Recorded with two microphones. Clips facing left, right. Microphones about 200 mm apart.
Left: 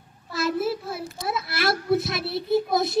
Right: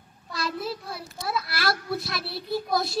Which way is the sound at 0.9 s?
20° left (ahead or behind).